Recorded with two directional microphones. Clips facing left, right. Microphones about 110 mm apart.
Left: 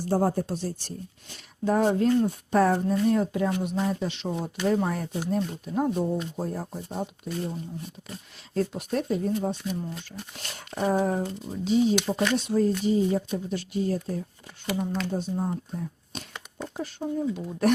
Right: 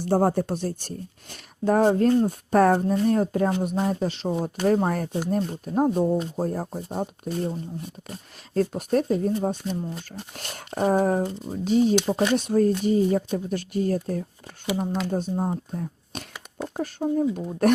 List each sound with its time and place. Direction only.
0.0 s speech: 65° right (ahead or behind); by 15.4 s 45° right (ahead or behind)
15.7 s a sound: 50° right (ahead or behind)
16.7 s speech: 45° right (ahead or behind)